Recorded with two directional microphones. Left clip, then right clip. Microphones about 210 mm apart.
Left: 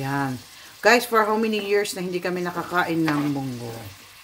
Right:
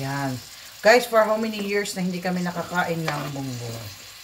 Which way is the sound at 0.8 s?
55° left (ahead or behind).